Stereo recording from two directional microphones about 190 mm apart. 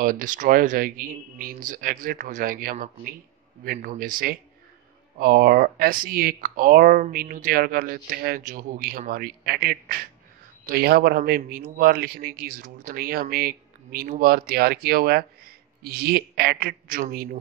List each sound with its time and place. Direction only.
0.0 s speech: 45° right (ahead or behind)